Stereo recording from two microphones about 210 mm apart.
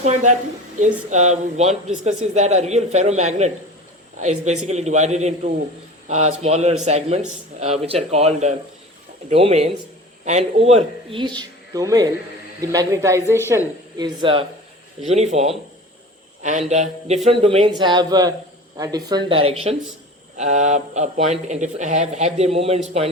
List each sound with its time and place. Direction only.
0.0 s speech: 35° right (ahead or behind)